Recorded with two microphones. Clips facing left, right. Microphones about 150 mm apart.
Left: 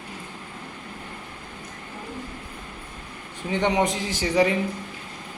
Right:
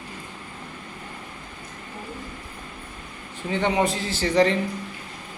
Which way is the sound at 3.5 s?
15° left (ahead or behind).